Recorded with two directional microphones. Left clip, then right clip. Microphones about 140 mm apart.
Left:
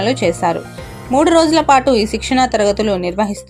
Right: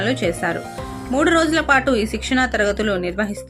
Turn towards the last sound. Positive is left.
turn(degrees=35)  # may be behind; listen again after turning